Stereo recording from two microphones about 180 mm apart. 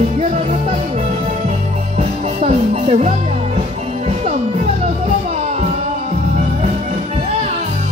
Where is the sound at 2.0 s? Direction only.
40° right (ahead or behind).